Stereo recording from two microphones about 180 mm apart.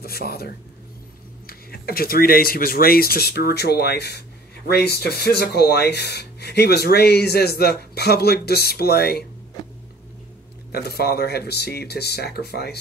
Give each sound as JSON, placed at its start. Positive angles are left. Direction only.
{"t": 0.0, "sound": "speech", "side_deg": 60}
{"t": 1.5, "sound": "speech", "side_deg": 55}
{"t": 10.7, "sound": "speech", "side_deg": 60}